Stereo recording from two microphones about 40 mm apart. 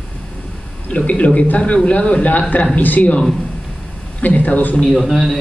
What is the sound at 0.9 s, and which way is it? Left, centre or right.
A man's voice, left.